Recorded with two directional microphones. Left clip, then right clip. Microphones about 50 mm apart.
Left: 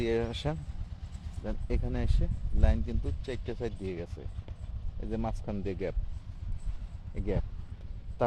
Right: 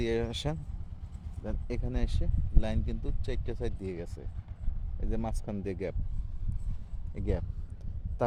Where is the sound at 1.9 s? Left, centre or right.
Right.